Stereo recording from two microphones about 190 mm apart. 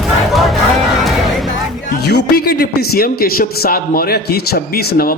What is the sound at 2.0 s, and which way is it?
A man's voice, 55° left (ahead or behind).